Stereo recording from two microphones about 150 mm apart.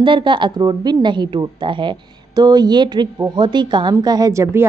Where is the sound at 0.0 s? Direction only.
35° right (ahead or behind).